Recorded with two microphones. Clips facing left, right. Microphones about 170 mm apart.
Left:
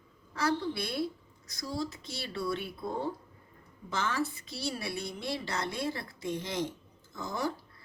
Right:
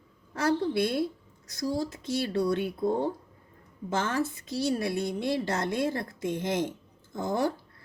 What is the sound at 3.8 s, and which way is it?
A woman's voice, 50° right (ahead or behind).